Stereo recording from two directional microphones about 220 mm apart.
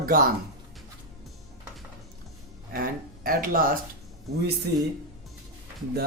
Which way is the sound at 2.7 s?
40° right (ahead or behind).